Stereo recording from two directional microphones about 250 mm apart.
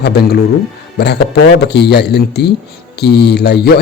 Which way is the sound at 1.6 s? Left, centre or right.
Left.